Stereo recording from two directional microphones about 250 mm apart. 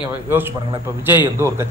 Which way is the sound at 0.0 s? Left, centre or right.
Centre.